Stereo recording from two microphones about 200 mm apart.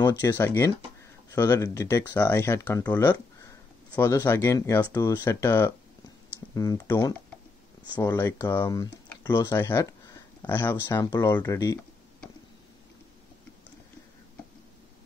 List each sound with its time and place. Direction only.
0.0 s speech: 20° left (ahead or behind)